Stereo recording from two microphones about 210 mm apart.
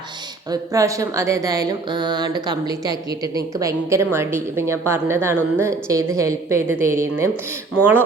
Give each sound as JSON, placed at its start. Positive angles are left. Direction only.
{"t": 0.5, "sound": "speech", "side_deg": -15}